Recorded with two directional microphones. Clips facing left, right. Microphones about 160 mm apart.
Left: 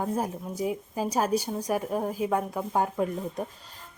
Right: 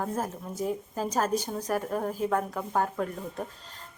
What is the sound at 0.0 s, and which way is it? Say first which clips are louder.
Speech: left 2 dB; 15° left (ahead or behind).